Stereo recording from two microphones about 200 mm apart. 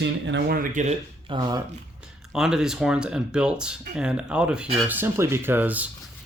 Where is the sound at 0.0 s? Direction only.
60° right (ahead or behind); by 0.9 s 40° right (ahead or behind).